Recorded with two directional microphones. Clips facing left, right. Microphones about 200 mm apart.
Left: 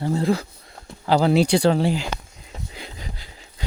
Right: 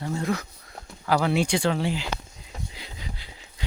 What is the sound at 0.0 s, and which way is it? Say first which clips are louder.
Speech: left 6 dB; 30° left (ahead or behind).